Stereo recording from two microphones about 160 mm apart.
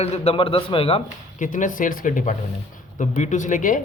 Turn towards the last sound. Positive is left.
turn(degrees=55)  # may be behind; listen again after turning